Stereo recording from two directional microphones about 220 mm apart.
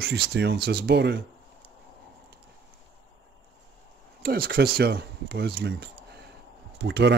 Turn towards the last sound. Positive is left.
turn(degrees=-50)  # may be behind; listen again after turning